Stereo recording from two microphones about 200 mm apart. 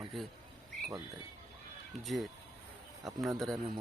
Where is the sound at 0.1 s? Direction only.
Centre (ahead or behind).